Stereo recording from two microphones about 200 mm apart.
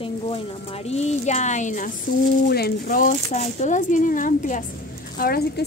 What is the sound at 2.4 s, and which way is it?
Speech, 50° left (ahead or behind).